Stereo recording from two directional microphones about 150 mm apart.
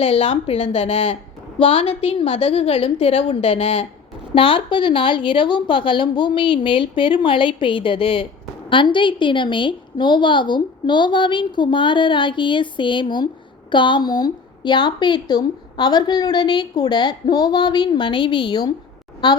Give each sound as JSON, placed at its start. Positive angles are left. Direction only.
{"t": 0.0, "sound": "a woman's voice", "side_deg": 40}